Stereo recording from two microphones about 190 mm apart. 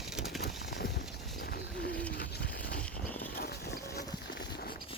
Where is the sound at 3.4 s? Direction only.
55° left (ahead or behind).